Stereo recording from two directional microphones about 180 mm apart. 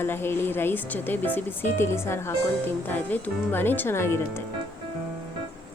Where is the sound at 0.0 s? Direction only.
10° left (ahead or behind).